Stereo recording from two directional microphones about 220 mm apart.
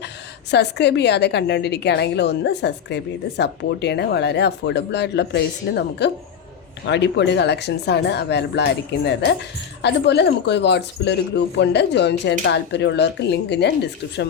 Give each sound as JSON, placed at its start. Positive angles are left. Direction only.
{"t": 0.5, "sound": "a woman's voice", "side_deg": 50}